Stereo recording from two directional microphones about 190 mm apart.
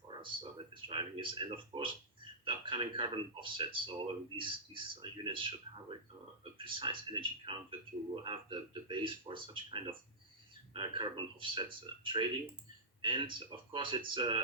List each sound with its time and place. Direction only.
0.7 s speech: 25° right (ahead or behind)